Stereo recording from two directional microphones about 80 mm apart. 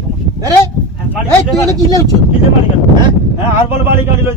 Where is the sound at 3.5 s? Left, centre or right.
Right.